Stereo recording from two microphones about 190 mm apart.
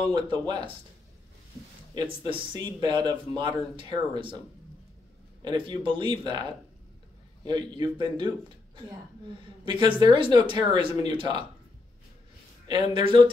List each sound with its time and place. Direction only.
0.1 s speech: 20° right (ahead or behind)
2.0 s speech: 25° right (ahead or behind)
5.4 s speech: 25° right (ahead or behind)
7.4 s speech: 20° right (ahead or behind)
9.7 s speech: 25° right (ahead or behind)
12.9 s speech: 25° right (ahead or behind)